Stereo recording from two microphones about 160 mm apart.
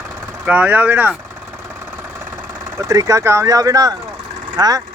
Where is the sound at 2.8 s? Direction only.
20° right (ahead or behind).